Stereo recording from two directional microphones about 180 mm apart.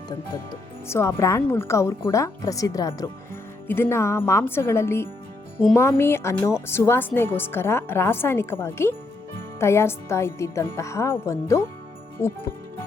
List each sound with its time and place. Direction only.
0.9 s speech: 15° left (ahead or behind)